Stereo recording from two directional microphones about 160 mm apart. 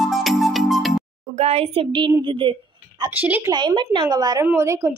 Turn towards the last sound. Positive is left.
turn(degrees=-15)  # may be behind; listen again after turning